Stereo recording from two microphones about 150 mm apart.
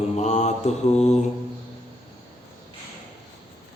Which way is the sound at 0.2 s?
50° left (ahead or behind).